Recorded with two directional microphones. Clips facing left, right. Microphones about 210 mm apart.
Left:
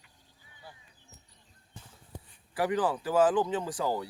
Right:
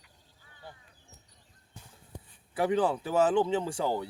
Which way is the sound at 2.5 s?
25° right (ahead or behind).